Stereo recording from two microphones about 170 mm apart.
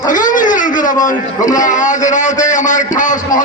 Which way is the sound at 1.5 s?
45° left (ahead or behind).